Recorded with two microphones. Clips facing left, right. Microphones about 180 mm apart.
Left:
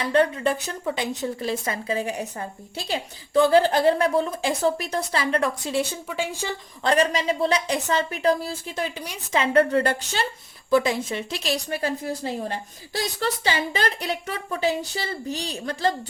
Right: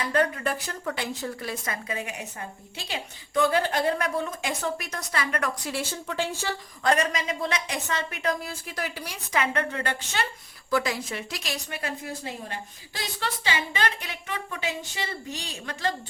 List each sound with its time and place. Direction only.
0.1 s a woman's voice: 25° left (ahead or behind)
6.8 s a woman's voice: 30° left (ahead or behind)
10.7 s a woman's voice: 25° left (ahead or behind)